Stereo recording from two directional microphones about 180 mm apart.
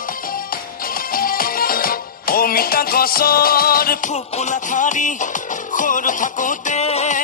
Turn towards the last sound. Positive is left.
turn(degrees=40)  # may be behind; listen again after turning